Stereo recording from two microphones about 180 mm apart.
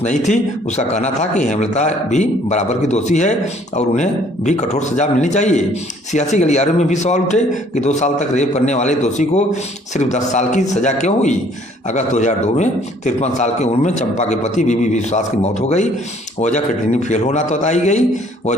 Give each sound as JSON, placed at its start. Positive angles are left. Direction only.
{"t": 0.0, "sound": "a man's voice", "side_deg": 40}